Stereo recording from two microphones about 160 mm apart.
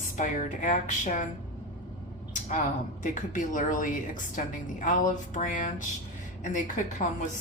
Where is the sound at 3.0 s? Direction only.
55° left (ahead or behind).